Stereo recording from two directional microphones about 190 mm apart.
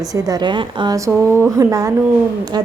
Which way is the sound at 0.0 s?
20° right (ahead or behind).